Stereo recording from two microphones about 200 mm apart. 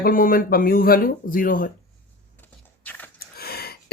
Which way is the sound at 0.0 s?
45° left (ahead or behind).